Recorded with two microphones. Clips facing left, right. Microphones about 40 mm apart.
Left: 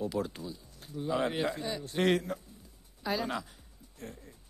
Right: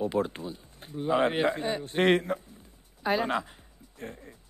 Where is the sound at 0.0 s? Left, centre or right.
Right.